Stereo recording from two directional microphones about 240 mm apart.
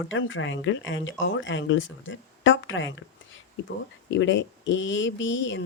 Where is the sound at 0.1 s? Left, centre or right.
Left.